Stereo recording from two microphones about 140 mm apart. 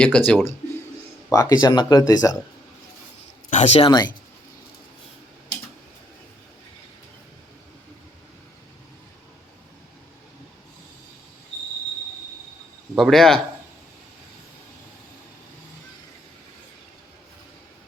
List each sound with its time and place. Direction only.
0.0 s speech: 10° left (ahead or behind)
1.3 s speech: 25° left (ahead or behind)
3.5 s speech: 55° left (ahead or behind)
3.8 s speech: 30° left (ahead or behind)
13.0 s speech: centre (ahead or behind)